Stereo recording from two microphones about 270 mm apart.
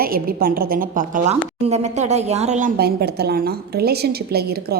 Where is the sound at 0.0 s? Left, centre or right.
Right.